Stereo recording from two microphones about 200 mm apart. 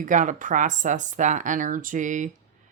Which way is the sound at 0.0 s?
40° right (ahead or behind).